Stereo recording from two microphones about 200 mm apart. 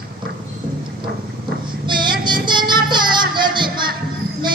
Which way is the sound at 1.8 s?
25° right (ahead or behind).